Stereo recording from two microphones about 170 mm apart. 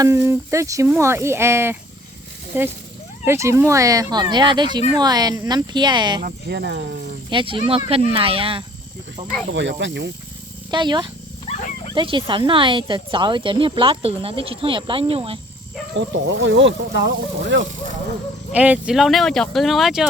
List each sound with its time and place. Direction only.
0.0 s speech: 15° right (ahead or behind)
6.5 s speech: 75° right (ahead or behind)
7.3 s speech: 30° right (ahead or behind)
9.5 s speech: 90° right
10.7 s speech: 25° right (ahead or behind)
16.0 s speech: 90° right
18.5 s speech: 10° right (ahead or behind)